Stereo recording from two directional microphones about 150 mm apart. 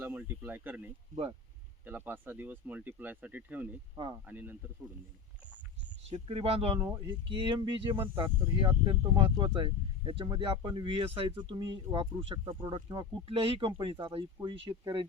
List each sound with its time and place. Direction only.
0.0 s speech: 15° right (ahead or behind)
1.1 s speech: 35° right (ahead or behind)
1.8 s speech: 10° right (ahead or behind)
3.9 s speech: 30° right (ahead or behind)
4.3 s speech: 10° right (ahead or behind)
6.2 s speech: 40° right (ahead or behind)